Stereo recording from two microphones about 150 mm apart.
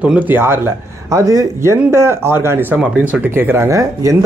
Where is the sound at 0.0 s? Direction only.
10° right (ahead or behind).